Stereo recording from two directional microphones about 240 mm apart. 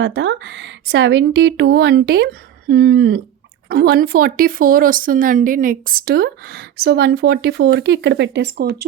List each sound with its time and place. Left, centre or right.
0.0 s speech: right